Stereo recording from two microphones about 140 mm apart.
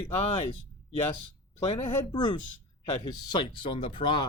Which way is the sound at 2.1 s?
30° left (ahead or behind).